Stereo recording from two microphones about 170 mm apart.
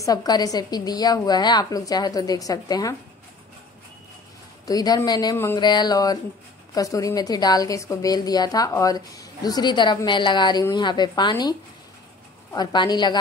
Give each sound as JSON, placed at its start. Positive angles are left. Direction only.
{"t": 0.0, "sound": "a woman's voice", "side_deg": 20}
{"t": 4.6, "sound": "a woman's voice", "side_deg": 20}
{"t": 12.5, "sound": "a woman's voice", "side_deg": 25}